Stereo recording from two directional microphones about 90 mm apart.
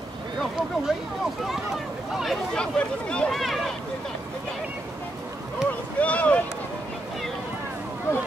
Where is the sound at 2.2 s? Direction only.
5° left (ahead or behind).